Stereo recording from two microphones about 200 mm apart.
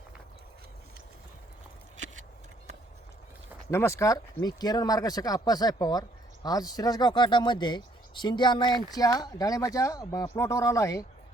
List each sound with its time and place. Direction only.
3.7 s speech: 15° left (ahead or behind)